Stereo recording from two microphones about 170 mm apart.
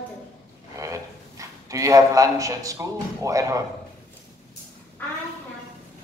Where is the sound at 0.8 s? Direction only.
20° right (ahead or behind).